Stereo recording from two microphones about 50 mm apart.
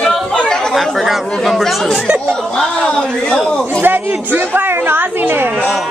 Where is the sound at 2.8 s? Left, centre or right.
Left.